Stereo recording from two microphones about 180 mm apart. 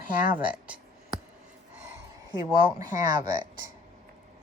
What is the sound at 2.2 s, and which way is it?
Speech, 20° right (ahead or behind).